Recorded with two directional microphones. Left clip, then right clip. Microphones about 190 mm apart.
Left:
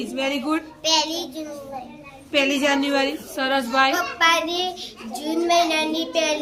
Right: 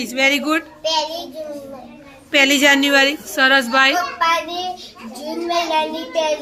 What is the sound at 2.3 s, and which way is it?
A woman's voice, 20° right (ahead or behind).